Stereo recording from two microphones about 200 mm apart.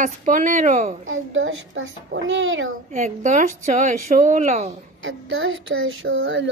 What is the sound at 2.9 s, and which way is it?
Speech, 40° right (ahead or behind).